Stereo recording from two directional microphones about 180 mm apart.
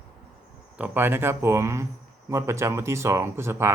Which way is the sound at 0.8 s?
10° right (ahead or behind).